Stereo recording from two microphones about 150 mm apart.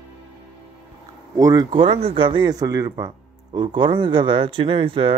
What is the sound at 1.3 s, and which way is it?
Speech, 25° right (ahead or behind).